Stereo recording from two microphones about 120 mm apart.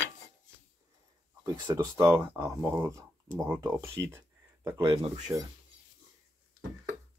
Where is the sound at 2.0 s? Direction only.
20° right (ahead or behind).